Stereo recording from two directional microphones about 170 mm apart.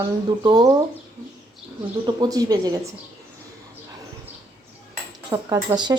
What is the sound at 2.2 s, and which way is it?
Speech, 25° right (ahead or behind).